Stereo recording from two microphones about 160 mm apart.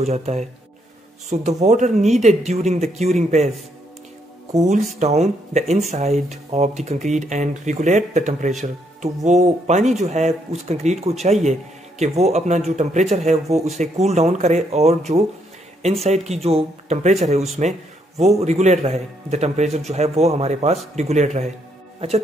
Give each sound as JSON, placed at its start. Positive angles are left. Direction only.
{"t": 0.0, "sound": "speech", "side_deg": -45}
{"t": 4.9, "sound": "speech", "side_deg": -45}